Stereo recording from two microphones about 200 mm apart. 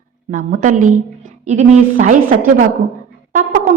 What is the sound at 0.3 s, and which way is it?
A woman's voice, 40° right (ahead or behind).